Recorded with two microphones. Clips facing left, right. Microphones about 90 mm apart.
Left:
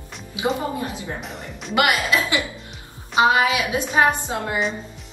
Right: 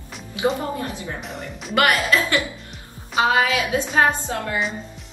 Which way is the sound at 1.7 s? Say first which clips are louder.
Right 1 dB; 20° left (ahead or behind).